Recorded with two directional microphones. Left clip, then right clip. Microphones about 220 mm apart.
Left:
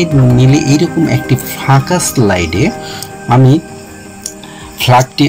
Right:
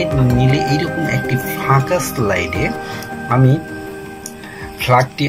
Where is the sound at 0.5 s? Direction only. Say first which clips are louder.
Left 5 dB; 65° left (ahead or behind).